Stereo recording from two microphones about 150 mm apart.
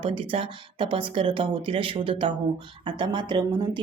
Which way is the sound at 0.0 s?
35° right (ahead or behind).